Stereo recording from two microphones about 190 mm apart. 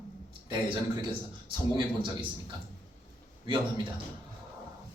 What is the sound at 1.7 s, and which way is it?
Speech, 25° right (ahead or behind).